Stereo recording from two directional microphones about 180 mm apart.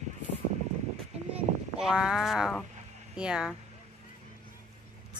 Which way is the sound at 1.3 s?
5° right (ahead or behind).